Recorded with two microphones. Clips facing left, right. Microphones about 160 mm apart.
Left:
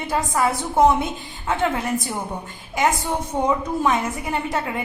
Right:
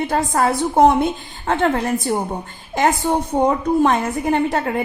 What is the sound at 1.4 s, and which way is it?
Speech, 60° right (ahead or behind).